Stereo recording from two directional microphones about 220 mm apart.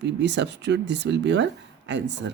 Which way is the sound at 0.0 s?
50° right (ahead or behind).